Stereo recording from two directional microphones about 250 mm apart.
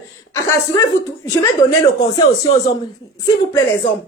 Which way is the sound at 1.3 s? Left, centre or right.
Centre.